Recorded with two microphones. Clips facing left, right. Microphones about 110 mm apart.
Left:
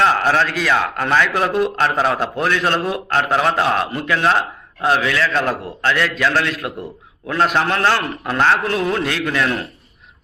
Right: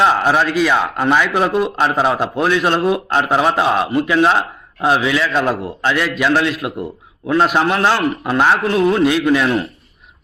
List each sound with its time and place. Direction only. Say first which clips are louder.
0.0 s a man's voice: right 2 dB; 15° right (ahead or behind)
0.4 s a man's voice: right 3 dB; 5° right (ahead or behind)
9.2 s a man's voice: right 5 dB; 15° right (ahead or behind)